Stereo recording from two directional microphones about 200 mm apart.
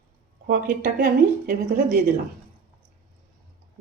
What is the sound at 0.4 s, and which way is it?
A woman's voice, 45° right (ahead or behind).